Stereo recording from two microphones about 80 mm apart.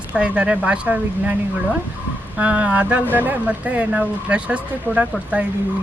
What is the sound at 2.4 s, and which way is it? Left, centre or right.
Speech, centre.